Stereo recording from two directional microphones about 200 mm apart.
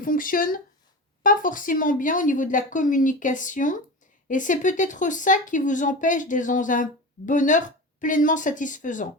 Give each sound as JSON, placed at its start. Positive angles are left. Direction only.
{"t": 0.0, "sound": "a woman's voice", "side_deg": 45}